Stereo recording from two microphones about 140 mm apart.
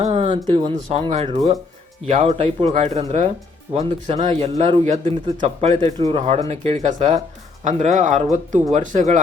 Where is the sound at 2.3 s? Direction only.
45° right (ahead or behind).